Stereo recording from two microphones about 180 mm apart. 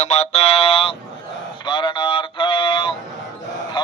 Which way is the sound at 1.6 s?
25° left (ahead or behind).